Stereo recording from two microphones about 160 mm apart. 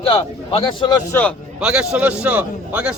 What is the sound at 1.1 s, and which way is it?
Speech, 10° left (ahead or behind).